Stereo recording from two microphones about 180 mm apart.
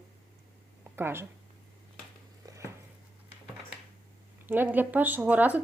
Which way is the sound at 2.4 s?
15° right (ahead or behind).